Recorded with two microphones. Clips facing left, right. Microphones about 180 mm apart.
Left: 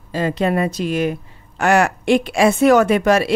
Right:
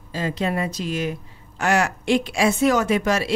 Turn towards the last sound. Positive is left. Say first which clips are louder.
# left 6 dB
turn(degrees=60)  # may be behind; listen again after turning